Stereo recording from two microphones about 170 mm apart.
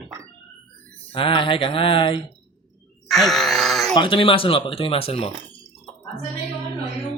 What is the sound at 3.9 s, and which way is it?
Speech, 30° left (ahead or behind).